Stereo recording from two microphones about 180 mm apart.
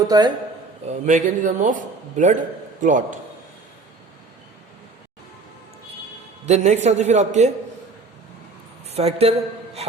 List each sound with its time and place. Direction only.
0.1 s speech: 20° right (ahead or behind)
0.9 s speech: 40° right (ahead or behind)
6.4 s a man's voice: 40° right (ahead or behind)
8.9 s speech: 35° right (ahead or behind)